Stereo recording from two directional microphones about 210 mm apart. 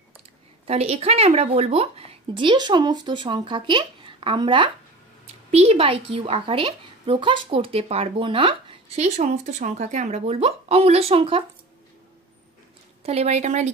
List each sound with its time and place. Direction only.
0.7 s a woman's voice: 30° right (ahead or behind)
13.0 s a woman's voice: 30° right (ahead or behind)